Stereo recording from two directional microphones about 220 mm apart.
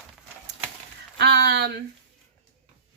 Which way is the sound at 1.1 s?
50° right (ahead or behind).